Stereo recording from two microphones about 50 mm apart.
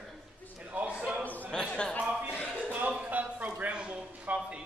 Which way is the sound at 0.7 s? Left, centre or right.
Right.